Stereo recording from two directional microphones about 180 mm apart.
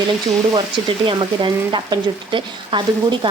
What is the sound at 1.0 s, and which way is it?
A woman's voice, 25° right (ahead or behind).